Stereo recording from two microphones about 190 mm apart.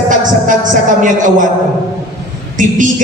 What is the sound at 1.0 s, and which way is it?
Speech, 45° right (ahead or behind).